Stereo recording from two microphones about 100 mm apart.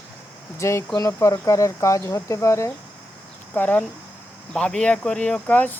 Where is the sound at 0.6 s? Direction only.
30° left (ahead or behind).